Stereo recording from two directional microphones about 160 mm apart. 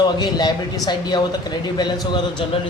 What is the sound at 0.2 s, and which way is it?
A man's voice, 25° left (ahead or behind).